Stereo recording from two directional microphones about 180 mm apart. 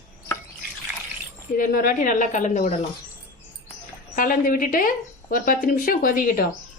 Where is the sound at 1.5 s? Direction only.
50° left (ahead or behind).